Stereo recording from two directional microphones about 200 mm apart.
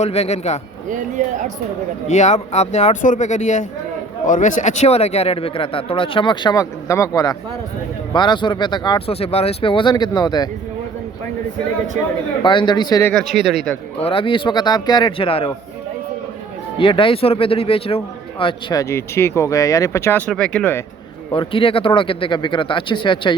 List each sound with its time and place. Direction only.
0.0 s speech: 30° left (ahead or behind)
0.9 s speech: 40° right (ahead or behind)
2.0 s speech: 35° left (ahead or behind)
12.4 s speech: 25° left (ahead or behind)
13.4 s a man's voice: centre (ahead or behind)
14.0 s speech: 25° left (ahead or behind)
16.7 s a man's voice: 25° left (ahead or behind); by 20.8 s 10° left (ahead or behind)
21.3 s speech: 25° left (ahead or behind)